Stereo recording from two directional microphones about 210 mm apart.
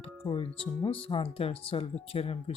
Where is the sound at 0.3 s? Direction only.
25° left (ahead or behind).